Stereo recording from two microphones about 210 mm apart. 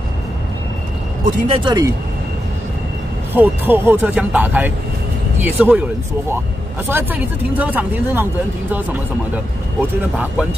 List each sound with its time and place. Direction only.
1.5 s speech: 20° right (ahead or behind)
3.3 s speech: 10° right (ahead or behind)
6.9 s speech: 10° right (ahead or behind)
9.3 s speech: 5° right (ahead or behind)